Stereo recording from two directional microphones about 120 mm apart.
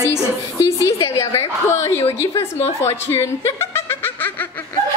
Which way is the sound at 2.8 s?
20° left (ahead or behind).